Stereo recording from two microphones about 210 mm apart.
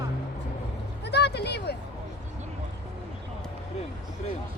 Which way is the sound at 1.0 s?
50° left (ahead or behind).